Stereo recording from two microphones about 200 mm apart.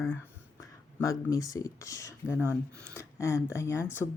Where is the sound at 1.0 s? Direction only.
15° left (ahead or behind).